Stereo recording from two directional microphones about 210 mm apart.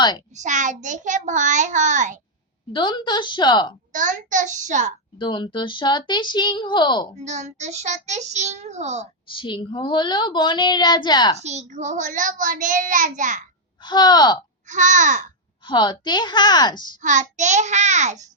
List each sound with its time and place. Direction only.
0.3 s a child's voice: 35° right (ahead or behind)
2.7 s speech: 25° left (ahead or behind)
3.9 s a child's voice: 35° right (ahead or behind)
5.1 s speech: 20° left (ahead or behind)
7.2 s a child's voice: 35° right (ahead or behind)
9.3 s speech: 25° left (ahead or behind)
11.3 s a child's voice: 30° right (ahead or behind)
13.8 s speech: 20° left (ahead or behind)
14.7 s a child's voice: 35° right (ahead or behind)
15.6 s speech: 20° left (ahead or behind)
17.0 s a child's voice: 35° right (ahead or behind)